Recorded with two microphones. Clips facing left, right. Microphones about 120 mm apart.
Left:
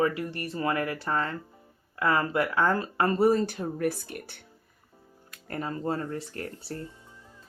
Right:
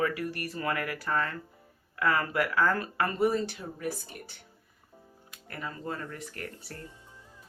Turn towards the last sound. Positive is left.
turn(degrees=30)  # may be behind; listen again after turning